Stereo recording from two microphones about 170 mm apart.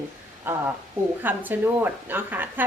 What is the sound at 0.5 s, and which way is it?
A woman's voice, 10° right (ahead or behind).